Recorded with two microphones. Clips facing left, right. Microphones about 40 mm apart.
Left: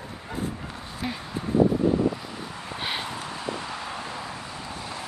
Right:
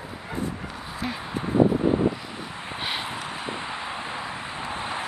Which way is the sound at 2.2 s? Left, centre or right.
Centre.